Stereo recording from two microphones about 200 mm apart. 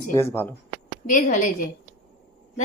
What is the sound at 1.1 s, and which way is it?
Speech, 40° left (ahead or behind).